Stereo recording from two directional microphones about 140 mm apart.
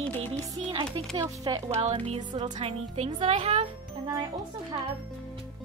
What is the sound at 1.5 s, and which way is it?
Speech, 35° right (ahead or behind).